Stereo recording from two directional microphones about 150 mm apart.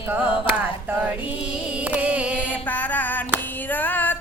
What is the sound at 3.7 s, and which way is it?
Female singing, 10° left (ahead or behind).